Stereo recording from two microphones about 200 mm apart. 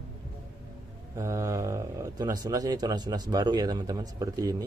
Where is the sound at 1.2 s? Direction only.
15° right (ahead or behind).